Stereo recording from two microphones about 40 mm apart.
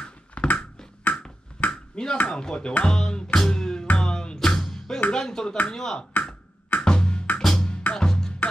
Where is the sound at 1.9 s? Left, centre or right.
Centre.